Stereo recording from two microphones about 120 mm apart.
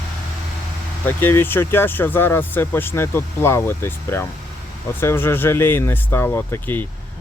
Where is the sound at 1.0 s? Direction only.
15° left (ahead or behind).